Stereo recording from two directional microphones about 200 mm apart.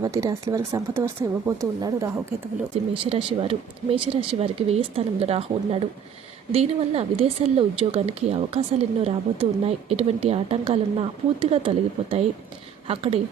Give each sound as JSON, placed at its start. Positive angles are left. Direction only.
{"t": 0.0, "sound": "speech", "side_deg": -15}
{"t": 2.9, "sound": "a woman's voice", "side_deg": -25}